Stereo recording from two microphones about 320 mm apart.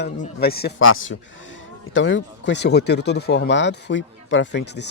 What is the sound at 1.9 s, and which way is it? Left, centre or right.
Speech, left.